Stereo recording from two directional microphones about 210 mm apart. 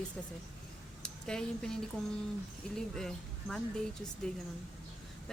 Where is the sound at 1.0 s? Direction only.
5° left (ahead or behind).